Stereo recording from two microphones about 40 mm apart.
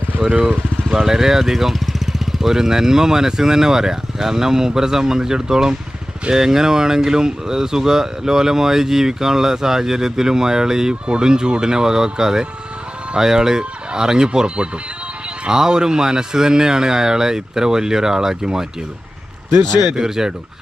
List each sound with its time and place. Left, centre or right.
0.3 s vehicle: right
0.9 s speech: centre
20.0 s speech: centre